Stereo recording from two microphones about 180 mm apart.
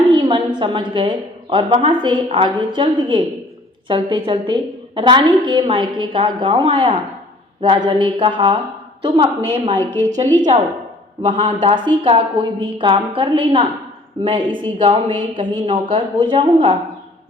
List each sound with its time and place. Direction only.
0.1 s a woman's voice: 25° right (ahead or behind)